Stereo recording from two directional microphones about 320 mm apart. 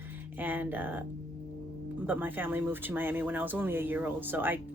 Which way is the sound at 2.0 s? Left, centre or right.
Centre.